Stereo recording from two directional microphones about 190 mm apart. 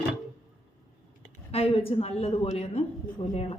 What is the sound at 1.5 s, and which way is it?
A woman's voice, 30° left (ahead or behind).